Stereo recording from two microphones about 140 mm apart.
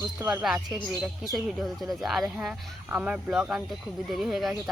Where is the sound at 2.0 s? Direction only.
Centre (ahead or behind).